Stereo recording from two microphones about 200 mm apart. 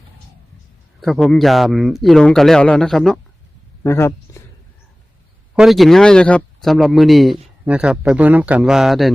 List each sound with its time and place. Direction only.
1.0 s speech: centre (ahead or behind)
3.8 s speech: 15° left (ahead or behind)
5.5 s speech: centre (ahead or behind)